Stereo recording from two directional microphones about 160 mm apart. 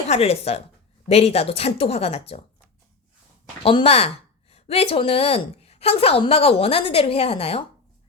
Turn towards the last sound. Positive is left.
turn(degrees=40)  # may be behind; listen again after turning